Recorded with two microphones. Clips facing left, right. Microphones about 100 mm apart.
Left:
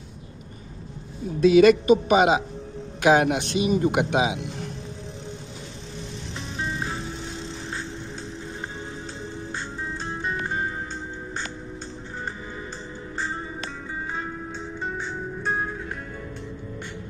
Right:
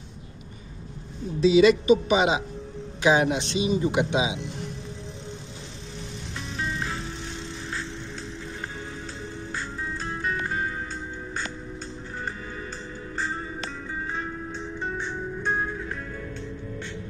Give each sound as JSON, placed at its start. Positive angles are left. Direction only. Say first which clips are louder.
{"t": 1.4, "sound": "speech", "louder": "left 2 dB", "side_deg": 55}
{"t": 6.6, "sound": "music", "louder": "left 1 dB", "side_deg": 30}
{"t": 9.5, "sound": "music", "louder": "right 1 dB", "side_deg": 25}
{"t": 13.2, "sound": "music", "louder": "even", "side_deg": 20}